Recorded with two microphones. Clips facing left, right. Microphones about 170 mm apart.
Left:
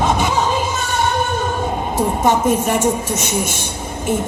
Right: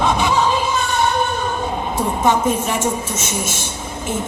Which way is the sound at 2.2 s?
50° left (ahead or behind).